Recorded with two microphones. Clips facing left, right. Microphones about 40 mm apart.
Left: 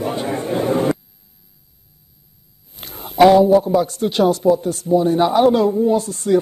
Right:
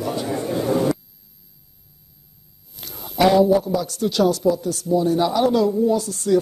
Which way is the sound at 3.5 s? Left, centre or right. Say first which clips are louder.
Left 5 dB; left.